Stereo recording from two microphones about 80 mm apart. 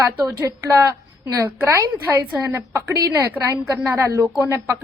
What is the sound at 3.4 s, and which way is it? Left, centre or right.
Speech, right.